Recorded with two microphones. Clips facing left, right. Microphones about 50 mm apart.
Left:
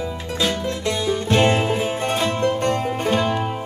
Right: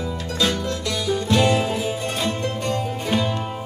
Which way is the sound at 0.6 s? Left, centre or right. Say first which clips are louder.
Left 2 dB; left.